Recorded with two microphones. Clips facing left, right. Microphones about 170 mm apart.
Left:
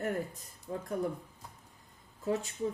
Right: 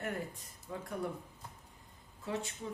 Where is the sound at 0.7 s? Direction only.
35° left (ahead or behind).